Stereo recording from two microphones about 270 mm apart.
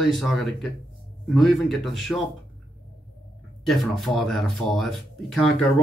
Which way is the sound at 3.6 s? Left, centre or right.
Centre.